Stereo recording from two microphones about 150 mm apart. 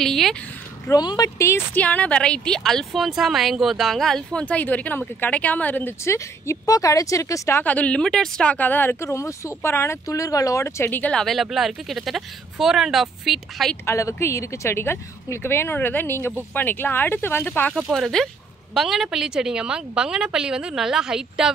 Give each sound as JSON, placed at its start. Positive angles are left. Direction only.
{"t": 0.0, "sound": "a woman's voice", "side_deg": 0}
{"t": 0.8, "sound": "a woman's voice", "side_deg": 25}
{"t": 13.8, "sound": "a woman's voice", "side_deg": 20}
{"t": 17.8, "sound": "a woman's voice", "side_deg": 0}